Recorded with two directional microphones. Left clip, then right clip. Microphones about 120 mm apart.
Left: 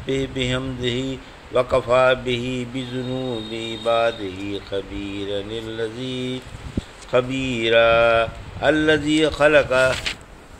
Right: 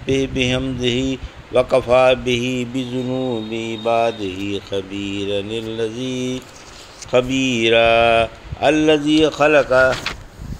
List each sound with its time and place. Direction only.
0.0 s speech: 45° right (ahead or behind)
3.1 s a sound: 30° right (ahead or behind)
3.5 s speech: 40° right (ahead or behind)
7.3 s speech: 15° left (ahead or behind)
7.6 s speech: 45° right (ahead or behind)
9.7 s a sound: 25° right (ahead or behind)